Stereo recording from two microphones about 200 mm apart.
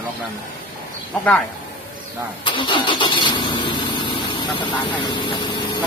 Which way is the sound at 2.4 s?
25° left (ahead or behind).